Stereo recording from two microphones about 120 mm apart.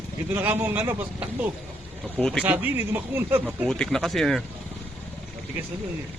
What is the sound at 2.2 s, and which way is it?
Speech, 5° left (ahead or behind).